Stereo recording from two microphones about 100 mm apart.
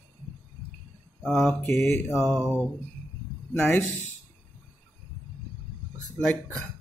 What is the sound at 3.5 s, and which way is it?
Speech, 20° left (ahead or behind).